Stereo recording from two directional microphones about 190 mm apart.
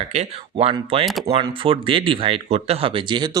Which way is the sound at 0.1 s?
30° right (ahead or behind).